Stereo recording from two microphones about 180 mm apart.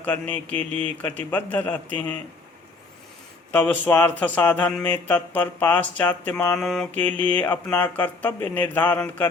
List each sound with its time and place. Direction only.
0.0 s speech: 10° left (ahead or behind)
0.5 s speech: 30° right (ahead or behind)
1.0 s speech: 10° left (ahead or behind)
3.5 s speech: 10° left (ahead or behind)